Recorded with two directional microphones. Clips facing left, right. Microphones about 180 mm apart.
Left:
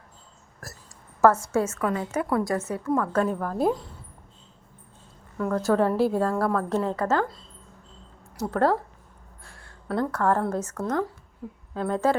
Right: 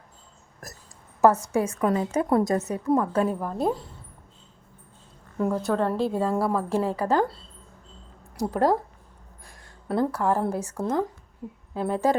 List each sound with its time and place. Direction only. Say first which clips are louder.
0.6 s a sound: even; 20° right (ahead or behind)
1.2 s a woman's voice: even; 15° right (ahead or behind); by 3.8 s centre (ahead or behind)
5.5 s speech: left 3 dB; 5° right (ahead or behind)
5.7 s a woman's voice: left 6 dB; 5° left (ahead or behind); by 7.3 s 10° right (ahead or behind)
8.4 s speech: right 1 dB; 15° right (ahead or behind)
9.4 s a sound: left 1 dB; 15° right (ahead or behind)
10.1 s speech: left 1 dB; 10° right (ahead or behind)